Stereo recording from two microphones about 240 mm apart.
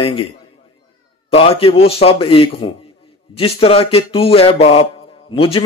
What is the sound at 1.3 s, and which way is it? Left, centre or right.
A man's voice, left.